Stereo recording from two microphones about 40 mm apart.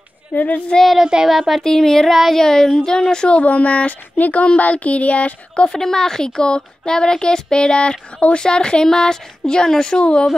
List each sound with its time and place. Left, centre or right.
0.3 s child singing: left
0.9 s child singing: centre
1.6 s speech: centre
3.3 s speech: left
5.7 s speech: centre